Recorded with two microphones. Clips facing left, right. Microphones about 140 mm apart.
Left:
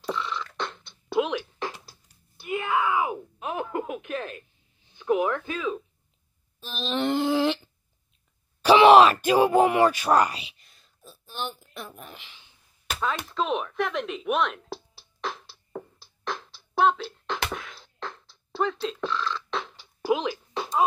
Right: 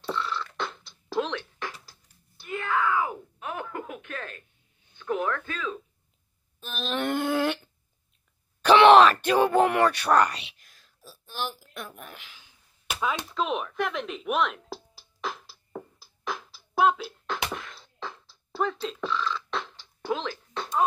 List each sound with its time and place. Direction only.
0.0 s beatboxing: centre (ahead or behind); by 2.0 s 20° left (ahead or behind)
2.4 s groan: 15° left (ahead or behind)
4.9 s speech: 15° left (ahead or behind)
6.6 s a sound: centre (ahead or behind)
8.6 s groan: 5° left (ahead or behind)
13.3 s a sound: centre (ahead or behind)
17.5 s beatboxing: centre (ahead or behind)